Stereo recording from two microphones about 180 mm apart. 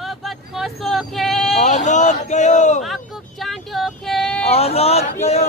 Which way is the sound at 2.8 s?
Centre (ahead or behind).